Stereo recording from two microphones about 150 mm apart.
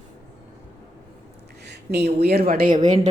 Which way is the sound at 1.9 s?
90° right.